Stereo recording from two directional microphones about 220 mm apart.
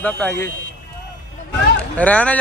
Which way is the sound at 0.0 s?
5° left (ahead or behind).